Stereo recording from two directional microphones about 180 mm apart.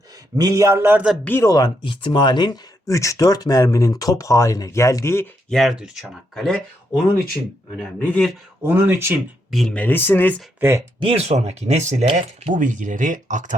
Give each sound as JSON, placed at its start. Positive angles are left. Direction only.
{"t": 0.3, "sound": "a man's voice", "side_deg": -20}
{"t": 1.2, "sound": "speech", "side_deg": 15}
{"t": 5.5, "sound": "speech", "side_deg": 0}
{"t": 8.6, "sound": "a man's voice", "side_deg": -10}
{"t": 9.5, "sound": "speech", "side_deg": 0}
{"t": 10.6, "sound": "speech", "side_deg": -15}
{"t": 11.0, "sound": "speech", "side_deg": -35}